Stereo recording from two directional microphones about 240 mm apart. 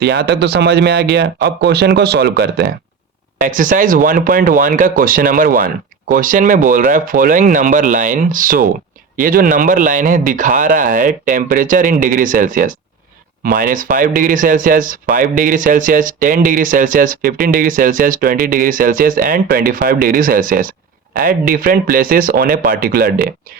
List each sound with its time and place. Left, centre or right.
0.0 s speech: right